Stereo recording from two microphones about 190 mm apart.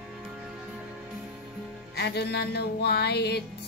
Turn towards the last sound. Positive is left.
turn(degrees=60)  # may be behind; listen again after turning